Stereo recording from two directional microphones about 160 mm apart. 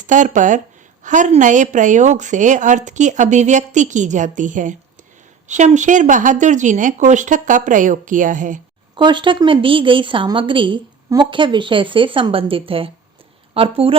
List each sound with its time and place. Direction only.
0.1 s a woman's voice: 50° right (ahead or behind)
9.0 s a woman's voice: 30° right (ahead or behind)